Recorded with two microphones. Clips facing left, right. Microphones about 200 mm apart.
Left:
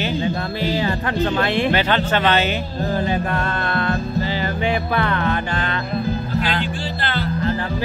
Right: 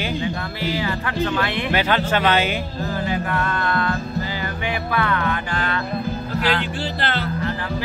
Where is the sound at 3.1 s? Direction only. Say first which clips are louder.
Left 1 dB; 25° left (ahead or behind).